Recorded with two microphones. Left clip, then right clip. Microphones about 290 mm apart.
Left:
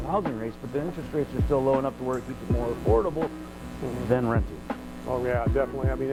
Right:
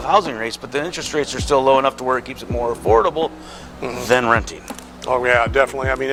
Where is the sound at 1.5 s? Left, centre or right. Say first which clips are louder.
Right 11 dB; right.